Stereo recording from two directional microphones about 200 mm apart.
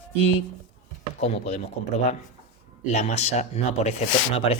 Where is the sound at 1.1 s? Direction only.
35° left (ahead or behind).